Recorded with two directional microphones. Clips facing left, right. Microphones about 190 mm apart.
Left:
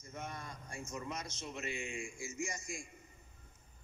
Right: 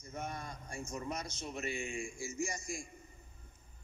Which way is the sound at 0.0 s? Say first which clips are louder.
Right 3 dB; 35° right (ahead or behind).